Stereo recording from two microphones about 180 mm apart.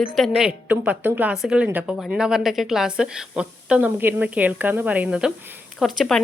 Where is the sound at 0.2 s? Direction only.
5° right (ahead or behind).